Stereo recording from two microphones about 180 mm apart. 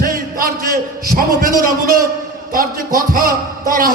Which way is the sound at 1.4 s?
50° right (ahead or behind).